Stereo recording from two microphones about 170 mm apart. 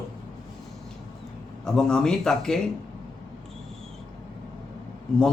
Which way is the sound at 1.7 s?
5° left (ahead or behind).